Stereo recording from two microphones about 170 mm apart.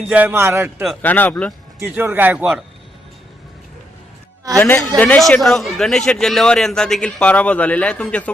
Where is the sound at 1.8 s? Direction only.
15° right (ahead or behind).